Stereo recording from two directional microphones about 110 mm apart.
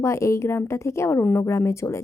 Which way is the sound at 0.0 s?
25° left (ahead or behind).